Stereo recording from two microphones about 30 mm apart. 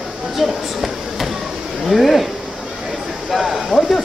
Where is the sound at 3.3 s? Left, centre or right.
Centre.